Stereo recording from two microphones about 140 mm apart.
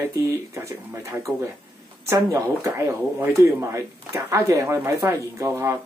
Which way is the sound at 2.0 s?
25° right (ahead or behind).